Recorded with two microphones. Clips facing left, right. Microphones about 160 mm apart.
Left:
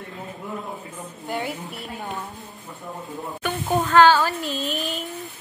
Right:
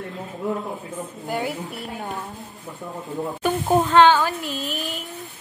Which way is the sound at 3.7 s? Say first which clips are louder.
Even; 20° right (ahead or behind).